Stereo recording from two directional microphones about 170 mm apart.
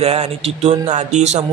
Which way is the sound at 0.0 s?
35° right (ahead or behind).